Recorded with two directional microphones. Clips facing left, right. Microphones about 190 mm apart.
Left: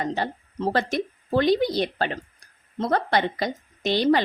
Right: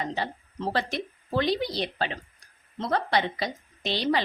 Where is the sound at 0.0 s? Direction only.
45° left (ahead or behind).